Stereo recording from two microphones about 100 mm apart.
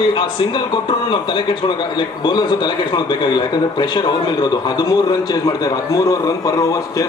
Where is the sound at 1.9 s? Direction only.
45° left (ahead or behind).